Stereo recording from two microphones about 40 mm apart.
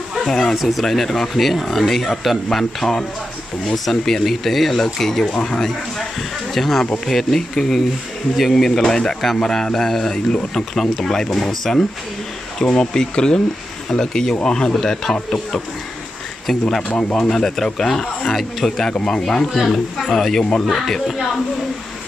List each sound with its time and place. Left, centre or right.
0.3 s speech: centre
0.6 s speech: centre
8.6 s speech: centre
12.5 s speech: centre
17.1 s speech: centre
18.3 s speech: centre
19.0 s speech: centre